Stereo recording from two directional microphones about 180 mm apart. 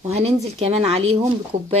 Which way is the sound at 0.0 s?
35° right (ahead or behind).